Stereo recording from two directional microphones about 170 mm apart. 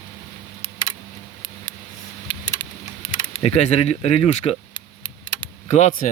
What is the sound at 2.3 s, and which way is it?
Typing, 25° left (ahead or behind).